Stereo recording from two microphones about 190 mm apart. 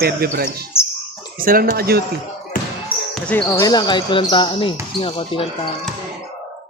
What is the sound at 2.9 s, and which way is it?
Basketball bounce, 25° left (ahead or behind).